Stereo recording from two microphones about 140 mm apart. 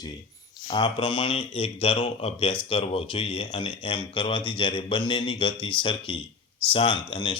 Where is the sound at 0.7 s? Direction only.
35° left (ahead or behind).